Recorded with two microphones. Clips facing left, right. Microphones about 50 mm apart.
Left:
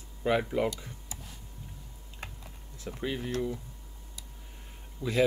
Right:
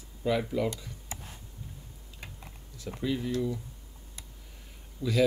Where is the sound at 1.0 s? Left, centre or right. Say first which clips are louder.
Right 3 dB; right.